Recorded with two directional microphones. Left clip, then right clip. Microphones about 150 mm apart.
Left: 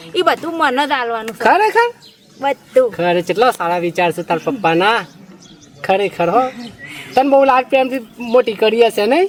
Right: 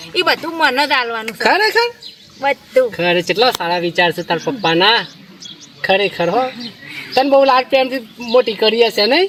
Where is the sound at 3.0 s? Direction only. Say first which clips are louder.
Even; centre (ahead or behind).